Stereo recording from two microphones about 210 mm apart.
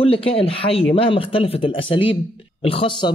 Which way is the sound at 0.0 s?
25° left (ahead or behind).